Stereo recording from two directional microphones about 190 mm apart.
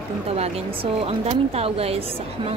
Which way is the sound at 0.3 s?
30° right (ahead or behind).